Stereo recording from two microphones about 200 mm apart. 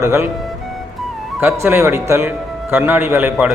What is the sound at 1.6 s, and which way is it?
A man's voice, 10° right (ahead or behind).